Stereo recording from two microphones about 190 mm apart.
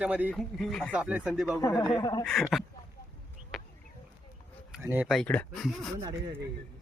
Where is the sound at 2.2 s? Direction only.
Centre (ahead or behind).